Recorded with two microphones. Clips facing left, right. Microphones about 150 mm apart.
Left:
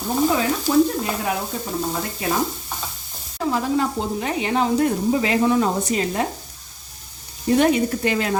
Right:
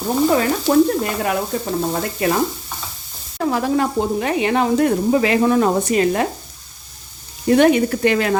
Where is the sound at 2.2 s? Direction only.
60° right (ahead or behind).